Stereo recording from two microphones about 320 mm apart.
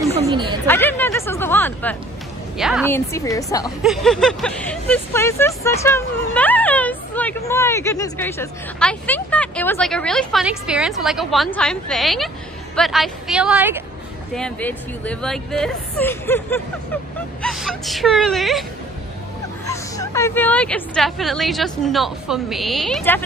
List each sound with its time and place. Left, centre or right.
0.0 s a sound: centre
0.7 s speech: centre
3.1 s speech: centre
3.8 s speech: centre
19.7 s speech: centre